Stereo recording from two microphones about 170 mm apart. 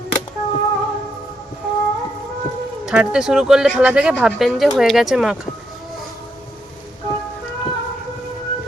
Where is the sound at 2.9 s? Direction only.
5° right (ahead or behind).